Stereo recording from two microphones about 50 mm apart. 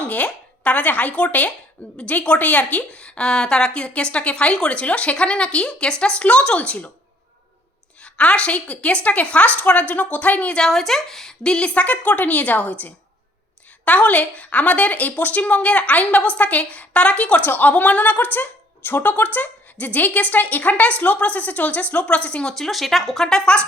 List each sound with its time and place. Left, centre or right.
0.0 s a sound: left
0.3 s a woman's voice: left
8.0 s a woman's voice: left
10.7 s a woman's voice: centre; by 12.7 s left
13.8 s a woman's voice: left
17.4 s a woman's voice: left
22.5 s speech: centre